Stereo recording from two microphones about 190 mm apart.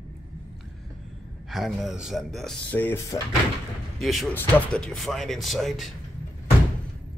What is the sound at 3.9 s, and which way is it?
Speech, centre (ahead or behind).